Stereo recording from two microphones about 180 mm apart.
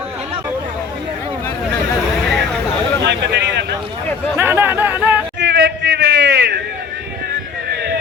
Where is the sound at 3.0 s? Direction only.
75° right (ahead or behind).